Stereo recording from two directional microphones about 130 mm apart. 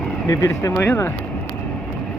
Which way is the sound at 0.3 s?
25° left (ahead or behind).